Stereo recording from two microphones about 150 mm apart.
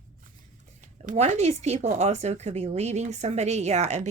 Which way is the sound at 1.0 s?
50° right (ahead or behind).